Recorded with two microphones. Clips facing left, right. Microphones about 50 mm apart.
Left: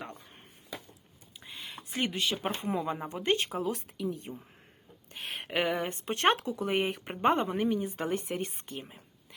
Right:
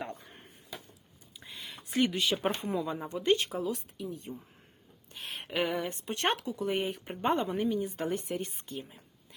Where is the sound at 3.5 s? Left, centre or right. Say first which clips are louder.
Left 1 dB; left.